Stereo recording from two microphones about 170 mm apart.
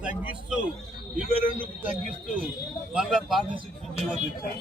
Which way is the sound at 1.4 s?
35° right (ahead or behind).